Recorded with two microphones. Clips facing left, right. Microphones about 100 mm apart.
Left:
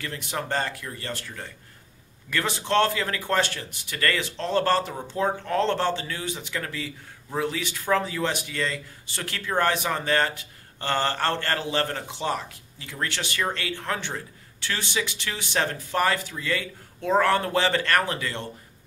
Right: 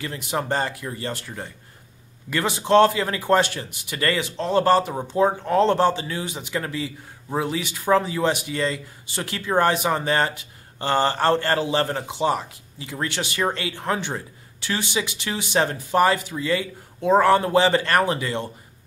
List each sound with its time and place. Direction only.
0.0 s a man's voice: 15° right (ahead or behind)